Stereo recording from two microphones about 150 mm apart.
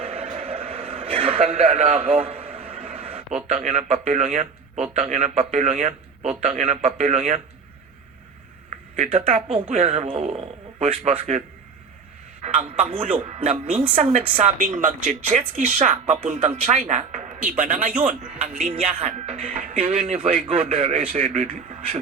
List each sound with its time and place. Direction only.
0.0 s a man's voice: 40° right (ahead or behind)
9.0 s a man's voice: 40° right (ahead or behind)
14.6 s speech: 60° right (ahead or behind)
15.4 s speech: 45° right (ahead or behind)
17.6 s speech: 65° right (ahead or behind)
18.7 s a man's voice: 35° right (ahead or behind)
19.4 s speech: 65° right (ahead or behind)
19.8 s a man's voice: 40° right (ahead or behind)